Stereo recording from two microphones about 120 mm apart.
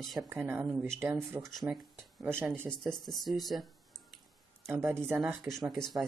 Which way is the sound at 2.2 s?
20° right (ahead or behind).